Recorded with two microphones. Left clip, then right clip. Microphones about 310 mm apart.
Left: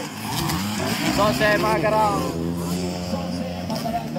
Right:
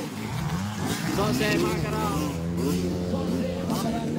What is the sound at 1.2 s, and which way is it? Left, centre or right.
Speech, centre.